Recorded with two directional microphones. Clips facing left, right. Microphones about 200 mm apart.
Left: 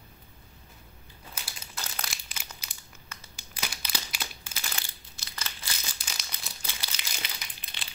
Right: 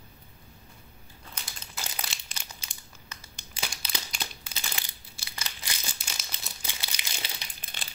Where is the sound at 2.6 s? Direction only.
30° right (ahead or behind).